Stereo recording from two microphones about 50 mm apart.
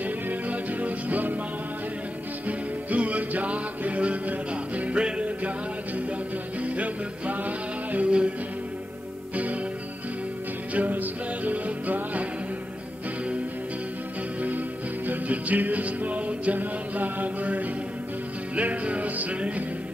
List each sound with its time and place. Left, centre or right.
0.0 s music: right
2.4 s music: right
6.6 s music: right
9.3 s music: right
10.7 s music: right
15.0 s music: right